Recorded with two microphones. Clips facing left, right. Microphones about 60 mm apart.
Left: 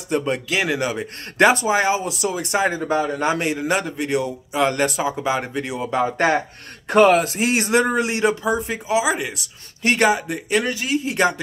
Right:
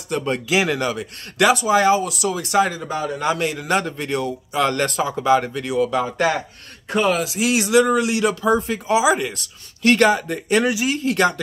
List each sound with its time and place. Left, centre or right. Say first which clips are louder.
0.7 s speech: even; centre
1.4 s speech: even; left
2.8 s speech: left 3 dB; left
3.7 s speech: right 2 dB; centre; by 6.4 s left
6.9 s speech: left 5 dB; left
8.4 s speech: right 3 dB; centre
8.9 s speech: right 3 dB; centre
9.8 s speech: right 2 dB; centre
10.5 s speech: right 3 dB; centre
11.1 s speech: right 2 dB; centre